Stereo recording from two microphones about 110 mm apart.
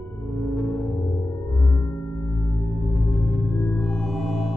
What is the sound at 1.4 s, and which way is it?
Chirp tone, 30° left (ahead or behind).